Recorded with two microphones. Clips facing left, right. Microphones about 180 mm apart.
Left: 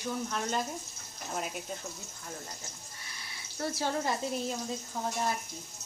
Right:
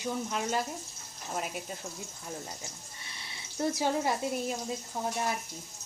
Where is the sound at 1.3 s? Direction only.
Centre (ahead or behind).